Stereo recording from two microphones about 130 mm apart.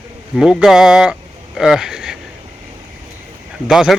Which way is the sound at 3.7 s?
5° right (ahead or behind).